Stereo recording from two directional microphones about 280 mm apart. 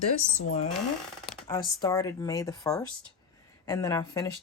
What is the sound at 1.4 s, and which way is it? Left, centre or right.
Speech, centre.